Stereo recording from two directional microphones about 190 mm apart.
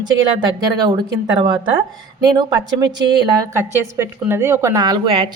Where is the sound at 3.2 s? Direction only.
20° right (ahead or behind).